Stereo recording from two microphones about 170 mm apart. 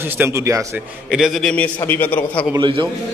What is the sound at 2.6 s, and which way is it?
Speech, 30° right (ahead or behind).